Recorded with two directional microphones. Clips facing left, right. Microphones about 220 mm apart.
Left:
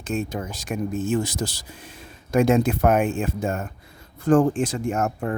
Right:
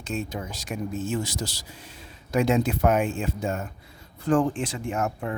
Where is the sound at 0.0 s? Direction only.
50° left (ahead or behind).